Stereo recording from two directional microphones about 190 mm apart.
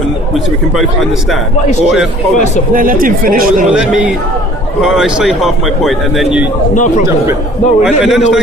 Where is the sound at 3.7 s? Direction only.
5° right (ahead or behind).